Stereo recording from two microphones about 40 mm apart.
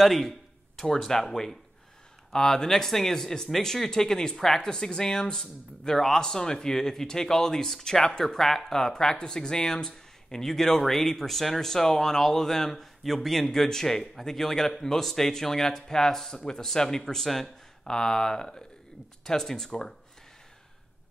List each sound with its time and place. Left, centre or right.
0.0 s speech: centre